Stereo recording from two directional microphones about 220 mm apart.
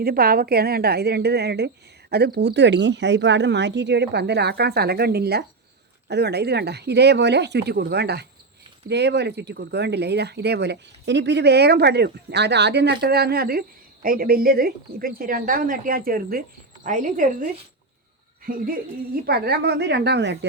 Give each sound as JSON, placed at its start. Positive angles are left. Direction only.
{"t": 0.0, "sound": "a woman's voice", "side_deg": -40}